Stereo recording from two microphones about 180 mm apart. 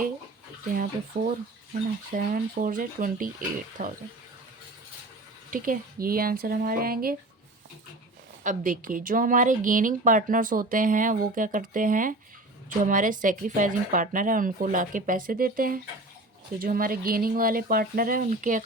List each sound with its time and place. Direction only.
1.2 s speech: 45° right (ahead or behind)
3.8 s speech: 35° right (ahead or behind)
5.5 s speech: 50° right (ahead or behind)
8.4 s speech: 50° right (ahead or behind)